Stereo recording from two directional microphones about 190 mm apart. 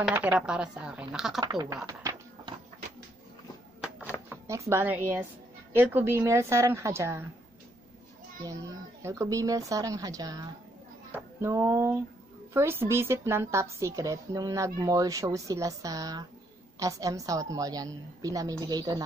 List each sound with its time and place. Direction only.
0.0 s speech: 10° right (ahead or behind)
1.4 s speech: 20° right (ahead or behind)
1.9 s a sound: 20° right (ahead or behind)
4.3 s a woman's voice: 15° right (ahead or behind)
9.0 s a woman's voice: 15° right (ahead or behind)